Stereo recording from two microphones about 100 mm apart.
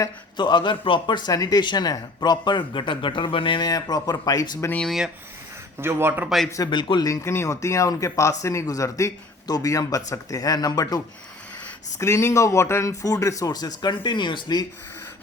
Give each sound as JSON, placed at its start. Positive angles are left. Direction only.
{"t": 0.3, "sound": "speech", "side_deg": 50}
{"t": 3.7, "sound": "speech", "side_deg": 40}
{"t": 4.8, "sound": "speech", "side_deg": 0}
{"t": 5.8, "sound": "a man's voice", "side_deg": -25}
{"t": 6.2, "sound": "speech", "side_deg": 0}
{"t": 6.7, "sound": "speech", "side_deg": 50}
{"t": 7.1, "sound": "speech", "side_deg": 30}
{"t": 11.9, "sound": "speech", "side_deg": 30}
{"t": 13.9, "sound": "speech", "side_deg": 50}